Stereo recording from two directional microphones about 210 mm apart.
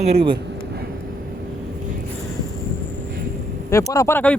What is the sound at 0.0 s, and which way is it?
Speech, 25° right (ahead or behind).